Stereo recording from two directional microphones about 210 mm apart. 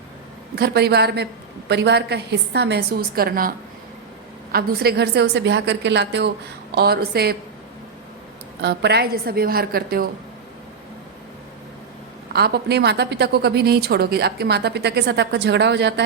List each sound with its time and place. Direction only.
0.5 s a woman's voice: 50° right (ahead or behind)
4.5 s a woman's voice: 50° right (ahead or behind)
8.6 s a woman's voice: 50° right (ahead or behind)
12.3 s a woman's voice: 50° right (ahead or behind)